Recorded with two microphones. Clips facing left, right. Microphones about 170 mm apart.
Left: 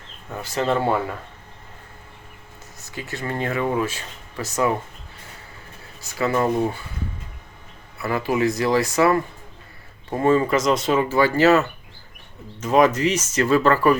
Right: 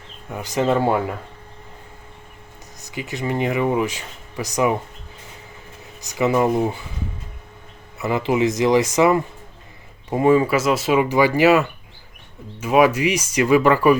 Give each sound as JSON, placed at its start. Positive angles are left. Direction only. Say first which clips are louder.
{"t": 0.3, "sound": "speech", "louder": "right 3 dB", "side_deg": -15}
{"t": 2.8, "sound": "speech", "louder": "right 4 dB", "side_deg": -15}
{"t": 6.0, "sound": "speech", "louder": "right 3 dB", "side_deg": -20}
{"t": 7.9, "sound": "speech", "louder": "right 2 dB", "side_deg": -20}